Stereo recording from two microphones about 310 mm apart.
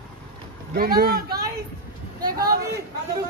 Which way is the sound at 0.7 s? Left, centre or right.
Right.